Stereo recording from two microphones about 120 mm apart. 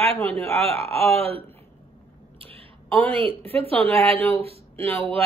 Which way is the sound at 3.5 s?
55° right (ahead or behind).